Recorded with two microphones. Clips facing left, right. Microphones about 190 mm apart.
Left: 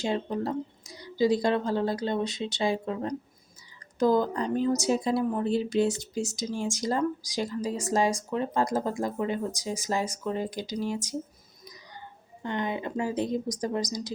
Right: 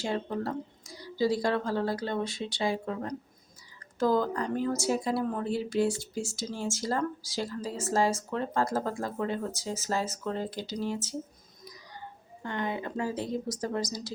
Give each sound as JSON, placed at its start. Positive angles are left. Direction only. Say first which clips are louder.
{"t": 0.0, "sound": "a woman's voice", "louder": "left 3 dB", "side_deg": 20}
{"t": 12.4, "sound": "a woman's voice", "louder": "left 2 dB", "side_deg": 20}